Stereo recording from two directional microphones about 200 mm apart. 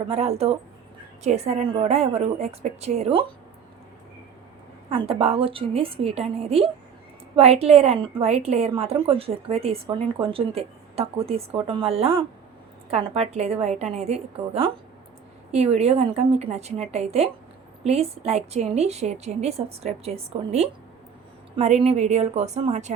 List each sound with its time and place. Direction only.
0.1 s a woman's voice: 30° right (ahead or behind)
4.9 s a woman's voice: 30° right (ahead or behind)